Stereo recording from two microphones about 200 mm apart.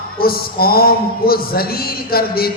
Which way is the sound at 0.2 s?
50° left (ahead or behind).